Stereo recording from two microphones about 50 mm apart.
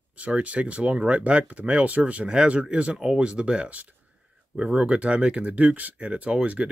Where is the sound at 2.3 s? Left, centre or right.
Centre.